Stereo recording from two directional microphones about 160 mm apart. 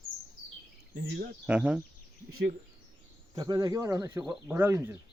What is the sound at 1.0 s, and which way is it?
Speech, 90° right.